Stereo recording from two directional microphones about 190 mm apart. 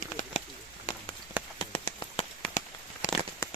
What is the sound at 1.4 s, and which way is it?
Rain on surface, 5° right (ahead or behind).